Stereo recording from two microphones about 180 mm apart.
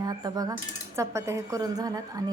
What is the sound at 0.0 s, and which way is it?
Cutlery, 20° right (ahead or behind).